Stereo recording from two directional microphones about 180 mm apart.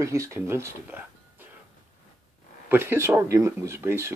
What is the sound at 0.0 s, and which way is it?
Speech, 15° right (ahead or behind).